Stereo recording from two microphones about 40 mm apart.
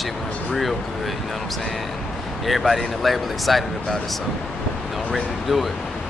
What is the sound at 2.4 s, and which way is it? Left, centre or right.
Speech, centre.